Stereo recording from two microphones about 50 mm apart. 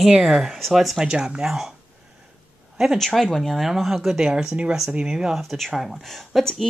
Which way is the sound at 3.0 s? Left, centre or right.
Centre.